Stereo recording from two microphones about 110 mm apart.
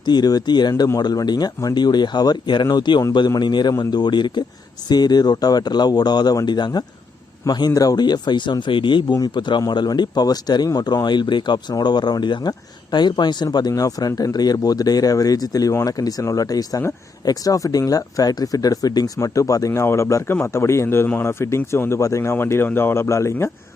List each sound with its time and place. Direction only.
0.0 s a man's voice: 40° left (ahead or behind)